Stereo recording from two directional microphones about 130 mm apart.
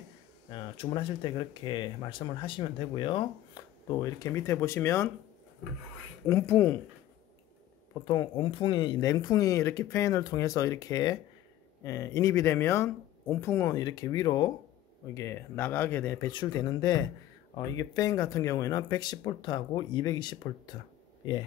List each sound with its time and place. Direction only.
0.5 s speech: 40° left (ahead or behind)
3.6 s a sound: 35° left (ahead or behind)
4.0 s speech: 25° left (ahead or behind)
6.2 s speech: 20° left (ahead or behind)
8.0 s speech: 30° left (ahead or behind)
15.1 s speech: 20° left (ahead or behind)
16.3 s speech: 35° left (ahead or behind)